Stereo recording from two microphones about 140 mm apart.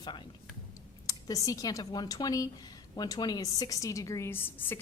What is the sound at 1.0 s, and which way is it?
A woman's voice, 25° left (ahead or behind).